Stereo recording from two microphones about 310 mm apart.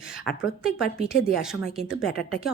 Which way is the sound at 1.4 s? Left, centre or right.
Centre.